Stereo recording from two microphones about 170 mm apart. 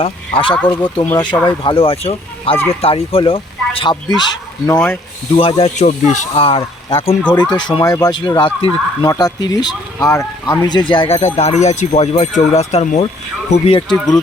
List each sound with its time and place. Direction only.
0.0 s speech: 30° left (ahead or behind)
4.6 s speech: 15° left (ahead or behind)
5.4 s speech: 35° left (ahead or behind)
7.7 s speech: 25° left (ahead or behind)